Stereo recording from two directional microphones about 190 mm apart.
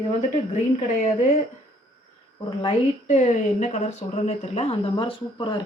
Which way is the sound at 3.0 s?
40° left (ahead or behind).